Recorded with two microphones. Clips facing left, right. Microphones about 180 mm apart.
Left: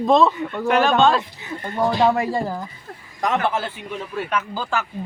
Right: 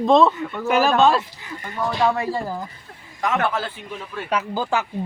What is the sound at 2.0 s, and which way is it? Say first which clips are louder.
Speech: left 2 dB; 15° left (ahead or behind).